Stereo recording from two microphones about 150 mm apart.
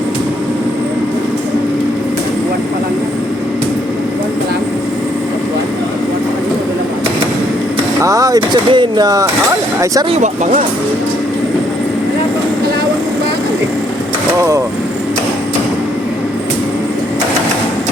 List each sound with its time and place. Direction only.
8.0 s speech: 20° right (ahead or behind)
10.1 s speech: 55° right (ahead or behind)
14.3 s speech: 20° right (ahead or behind)